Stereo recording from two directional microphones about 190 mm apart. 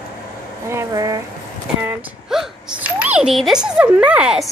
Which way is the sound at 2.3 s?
5° right (ahead or behind).